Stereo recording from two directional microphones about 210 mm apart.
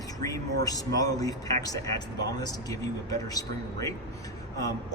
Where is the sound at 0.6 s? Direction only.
15° left (ahead or behind).